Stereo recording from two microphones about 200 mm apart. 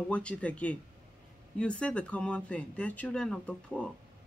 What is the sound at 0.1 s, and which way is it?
A woman's voice, 5° left (ahead or behind).